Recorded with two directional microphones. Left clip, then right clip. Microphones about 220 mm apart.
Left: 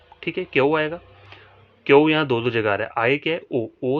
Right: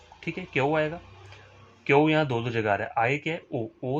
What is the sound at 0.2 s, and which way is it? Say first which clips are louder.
Speech: left 7 dB; 45° left (ahead or behind).